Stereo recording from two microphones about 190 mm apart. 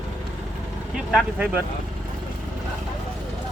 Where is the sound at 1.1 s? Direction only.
5° right (ahead or behind).